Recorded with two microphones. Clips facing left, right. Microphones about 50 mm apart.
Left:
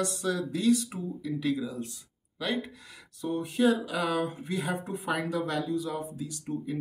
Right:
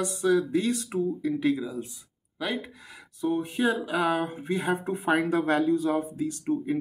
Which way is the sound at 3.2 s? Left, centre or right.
Right.